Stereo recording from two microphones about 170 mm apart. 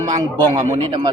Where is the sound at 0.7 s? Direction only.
25° right (ahead or behind).